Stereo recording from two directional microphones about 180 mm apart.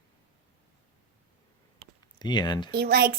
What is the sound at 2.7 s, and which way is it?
Speech, 65° right (ahead or behind).